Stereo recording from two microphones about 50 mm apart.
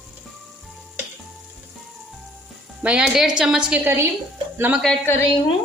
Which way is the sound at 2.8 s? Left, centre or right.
Right.